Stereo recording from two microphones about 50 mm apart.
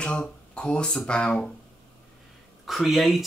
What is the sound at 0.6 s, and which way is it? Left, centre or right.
Speech, centre.